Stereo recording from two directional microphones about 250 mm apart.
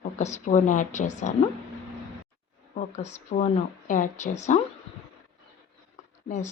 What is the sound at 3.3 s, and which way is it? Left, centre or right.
Speech, left.